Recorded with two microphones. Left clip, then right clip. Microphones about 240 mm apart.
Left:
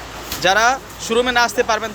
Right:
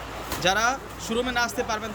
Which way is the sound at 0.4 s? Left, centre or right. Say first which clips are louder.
Left 8 dB; centre.